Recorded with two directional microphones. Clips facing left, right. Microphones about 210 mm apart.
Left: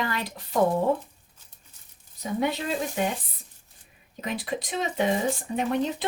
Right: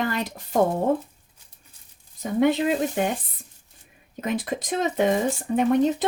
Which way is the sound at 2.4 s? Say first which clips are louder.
Right 8 dB; 50° right (ahead or behind).